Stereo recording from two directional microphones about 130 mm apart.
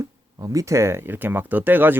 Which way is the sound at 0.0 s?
25° right (ahead or behind).